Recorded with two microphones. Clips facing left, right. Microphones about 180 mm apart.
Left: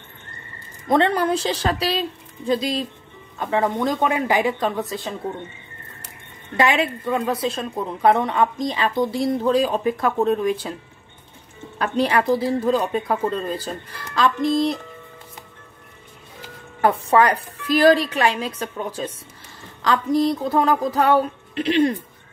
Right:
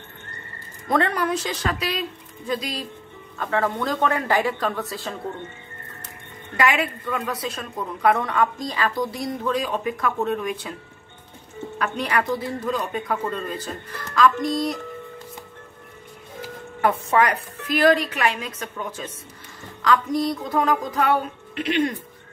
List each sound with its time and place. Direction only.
0.8 s a woman's voice: 25° left (ahead or behind)
6.5 s a woman's voice: 25° left (ahead or behind)
11.8 s a woman's voice: 30° left (ahead or behind)
16.8 s a woman's voice: 35° left (ahead or behind)